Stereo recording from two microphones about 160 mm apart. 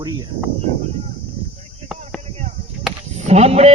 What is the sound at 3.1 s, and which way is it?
Speech, 45° right (ahead or behind).